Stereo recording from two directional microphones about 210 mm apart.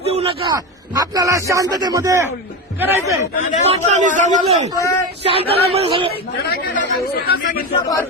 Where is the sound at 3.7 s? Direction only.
35° right (ahead or behind).